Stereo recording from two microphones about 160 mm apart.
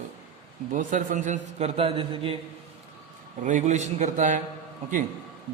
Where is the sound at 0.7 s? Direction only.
55° right (ahead or behind); by 2.3 s 35° right (ahead or behind).